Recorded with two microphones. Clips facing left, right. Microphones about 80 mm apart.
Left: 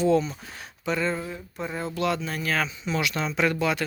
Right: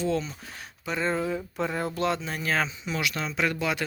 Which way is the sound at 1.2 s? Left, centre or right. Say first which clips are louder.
Right 5 dB; right.